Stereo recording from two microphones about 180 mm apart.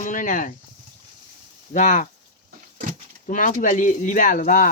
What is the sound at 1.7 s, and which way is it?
Speech, 45° left (ahead or behind).